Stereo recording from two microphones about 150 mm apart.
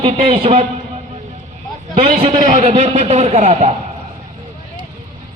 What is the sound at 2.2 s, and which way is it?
Speech, 50° right (ahead or behind).